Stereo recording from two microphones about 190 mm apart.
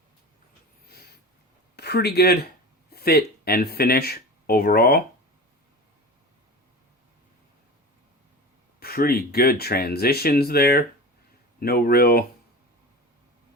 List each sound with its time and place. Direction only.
1.7 s speech: 60° left (ahead or behind)
8.8 s speech: 50° left (ahead or behind)